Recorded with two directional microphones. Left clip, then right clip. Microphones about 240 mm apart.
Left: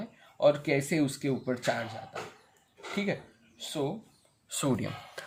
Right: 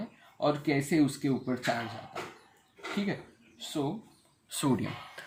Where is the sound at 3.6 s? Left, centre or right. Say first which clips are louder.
Left 1 dB; left.